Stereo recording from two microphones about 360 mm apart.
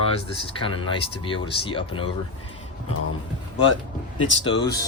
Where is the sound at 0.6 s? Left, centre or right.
Centre.